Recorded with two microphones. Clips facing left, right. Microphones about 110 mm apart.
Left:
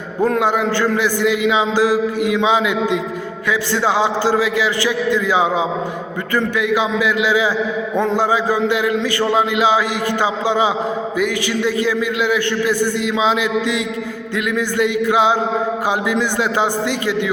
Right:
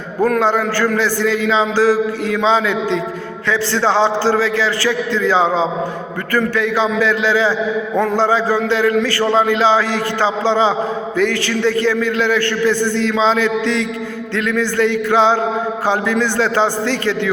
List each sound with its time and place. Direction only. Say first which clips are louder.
0.2 s a man's voice: right 1 dB; 15° left (ahead or behind)